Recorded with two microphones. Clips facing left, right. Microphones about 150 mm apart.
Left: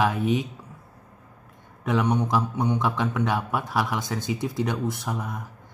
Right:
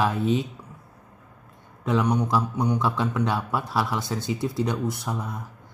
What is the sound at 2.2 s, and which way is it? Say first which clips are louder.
Speech: even; 20° left (ahead or behind).